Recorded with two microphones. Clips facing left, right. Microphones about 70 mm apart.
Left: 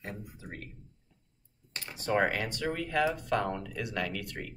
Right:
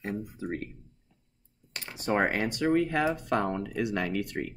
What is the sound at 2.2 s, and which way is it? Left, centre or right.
Speech, right.